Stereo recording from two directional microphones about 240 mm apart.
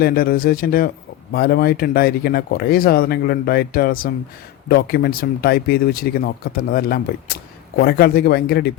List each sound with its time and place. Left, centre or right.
0.0 s speech: left